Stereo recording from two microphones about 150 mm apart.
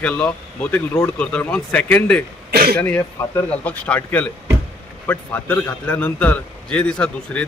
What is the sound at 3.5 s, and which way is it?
A man's voice, 10° left (ahead or behind).